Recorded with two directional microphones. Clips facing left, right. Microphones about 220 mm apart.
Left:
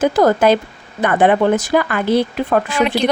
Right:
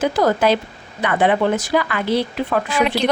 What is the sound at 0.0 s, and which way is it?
A woman's voice, 50° left (ahead or behind).